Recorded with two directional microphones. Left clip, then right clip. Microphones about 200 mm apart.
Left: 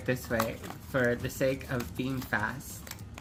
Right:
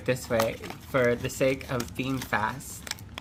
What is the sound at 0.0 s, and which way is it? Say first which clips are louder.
Speech: right 5 dB; 35° right (ahead or behind).